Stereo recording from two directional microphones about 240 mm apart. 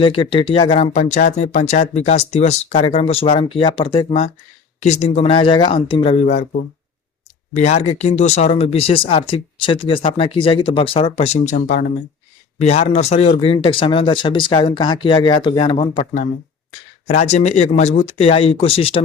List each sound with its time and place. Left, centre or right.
0.0 s speech: left